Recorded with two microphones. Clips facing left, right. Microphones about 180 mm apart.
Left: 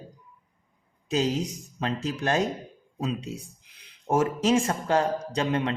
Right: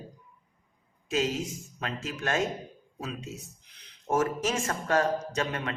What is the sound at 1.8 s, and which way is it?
Speech, 35° left (ahead or behind).